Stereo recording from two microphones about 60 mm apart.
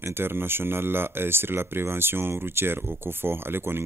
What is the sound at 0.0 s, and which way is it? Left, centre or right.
Speech, right.